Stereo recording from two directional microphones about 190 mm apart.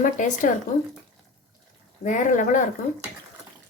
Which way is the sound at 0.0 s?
45° left (ahead or behind).